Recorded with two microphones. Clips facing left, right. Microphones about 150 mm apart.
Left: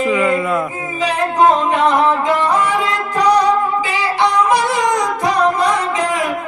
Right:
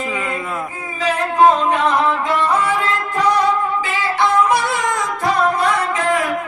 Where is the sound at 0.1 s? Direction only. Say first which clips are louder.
Left 9 dB; 90° left.